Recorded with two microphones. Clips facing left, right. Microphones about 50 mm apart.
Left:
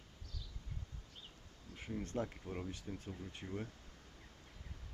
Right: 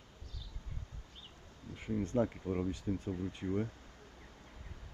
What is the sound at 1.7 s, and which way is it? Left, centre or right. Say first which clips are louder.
Speech: right 7 dB; centre.